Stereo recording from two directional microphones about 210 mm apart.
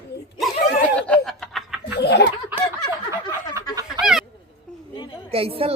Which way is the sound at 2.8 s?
20° left (ahead or behind).